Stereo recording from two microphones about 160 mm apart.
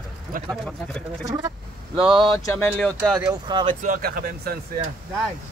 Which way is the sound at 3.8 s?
60° right (ahead or behind).